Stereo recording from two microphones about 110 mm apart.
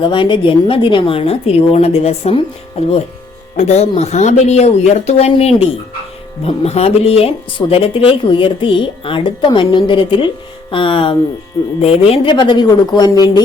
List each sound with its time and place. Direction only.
0.0 s speech: 50° left (ahead or behind); by 3.0 s 65° left (ahead or behind)
3.6 s speech: 85° left; by 12.3 s 60° left (ahead or behind)
12.3 s speech: 40° left (ahead or behind)